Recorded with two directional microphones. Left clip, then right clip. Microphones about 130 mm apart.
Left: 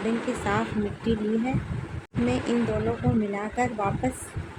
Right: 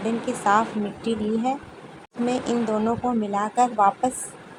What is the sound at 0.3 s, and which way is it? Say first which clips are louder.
Speech: right 2 dB; 30° right (ahead or behind).